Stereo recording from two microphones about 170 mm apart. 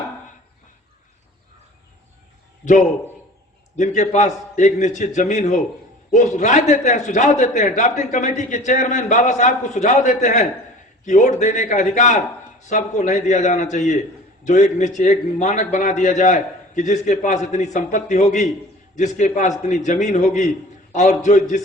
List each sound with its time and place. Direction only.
3.8 s a man's voice: 45° left (ahead or behind)